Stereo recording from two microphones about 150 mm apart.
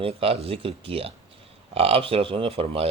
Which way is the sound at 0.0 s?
40° right (ahead or behind).